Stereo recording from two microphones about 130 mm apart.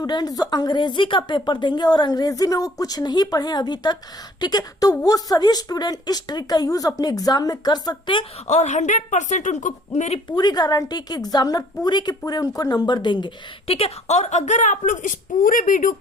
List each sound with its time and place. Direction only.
0.0 s a woman's voice: 30° left (ahead or behind)
8.4 s a woman's voice: 65° left (ahead or behind)
10.2 s a woman's voice: 35° left (ahead or behind); by 16.0 s 90° left